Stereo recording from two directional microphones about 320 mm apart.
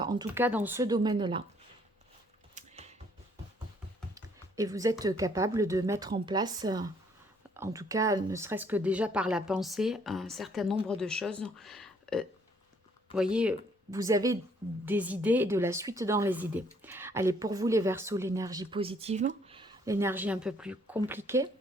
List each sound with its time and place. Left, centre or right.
0.0 s speech: centre
2.6 s music: centre
4.1 s speech: centre